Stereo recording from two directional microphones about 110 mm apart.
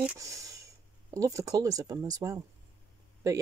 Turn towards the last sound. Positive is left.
turn(degrees=-30)  # may be behind; listen again after turning